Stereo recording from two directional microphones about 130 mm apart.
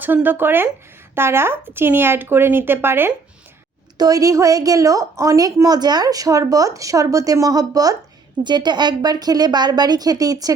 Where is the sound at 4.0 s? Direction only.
25° right (ahead or behind).